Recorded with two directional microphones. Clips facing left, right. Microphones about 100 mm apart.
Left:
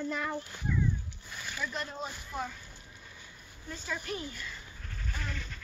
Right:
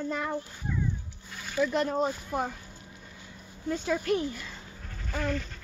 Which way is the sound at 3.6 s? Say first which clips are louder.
Right 10 dB; 55° right (ahead or behind).